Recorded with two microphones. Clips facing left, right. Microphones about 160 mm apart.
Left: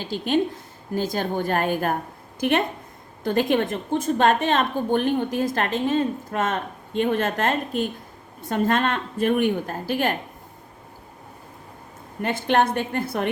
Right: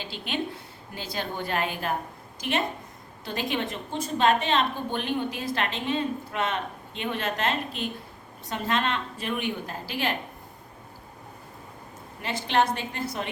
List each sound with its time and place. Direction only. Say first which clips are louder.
0.0 s a woman's voice: left 9 dB; 45° left (ahead or behind)
12.2 s a woman's voice: left 4 dB; 50° left (ahead or behind)